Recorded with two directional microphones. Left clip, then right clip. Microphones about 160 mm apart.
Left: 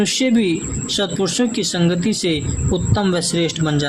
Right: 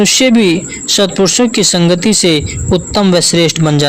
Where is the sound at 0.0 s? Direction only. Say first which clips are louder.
Right 9 dB; 55° right (ahead or behind).